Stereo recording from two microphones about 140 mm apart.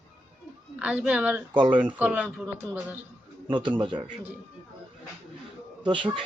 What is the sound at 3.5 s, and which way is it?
Speech, 35° right (ahead or behind).